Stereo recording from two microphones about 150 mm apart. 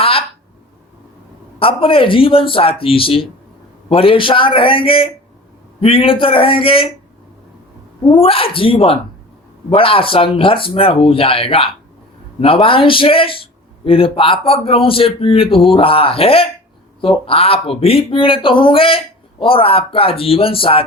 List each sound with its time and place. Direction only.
0.0 s a sound: 40° left (ahead or behind)
1.5 s a man's voice: 35° left (ahead or behind)
8.0 s a man's voice: 35° left (ahead or behind)